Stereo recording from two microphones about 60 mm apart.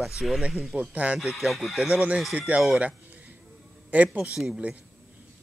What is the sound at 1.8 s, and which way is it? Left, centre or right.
Speech, centre.